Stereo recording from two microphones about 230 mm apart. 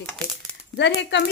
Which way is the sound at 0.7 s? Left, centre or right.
Left.